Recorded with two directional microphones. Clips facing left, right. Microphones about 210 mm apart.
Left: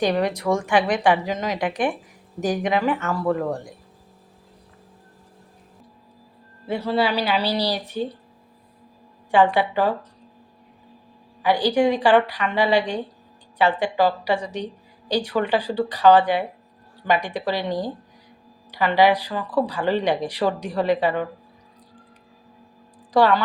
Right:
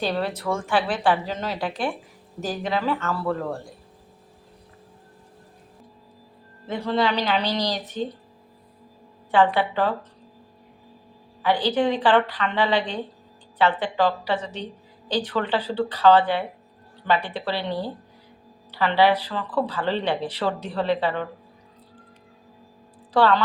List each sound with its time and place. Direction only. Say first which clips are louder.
0.0 s a woman's voice: left 4 dB; 15° left (ahead or behind)
6.7 s a woman's voice: left 1 dB; 10° left (ahead or behind)
9.3 s a woman's voice: left 2 dB; 15° left (ahead or behind)
11.4 s a woman's voice: left 3 dB; 10° left (ahead or behind)
23.1 s a woman's voice: left 2 dB; 15° left (ahead or behind)